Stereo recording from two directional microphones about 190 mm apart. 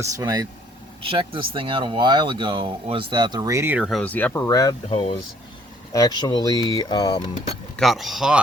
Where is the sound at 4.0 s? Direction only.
10° left (ahead or behind).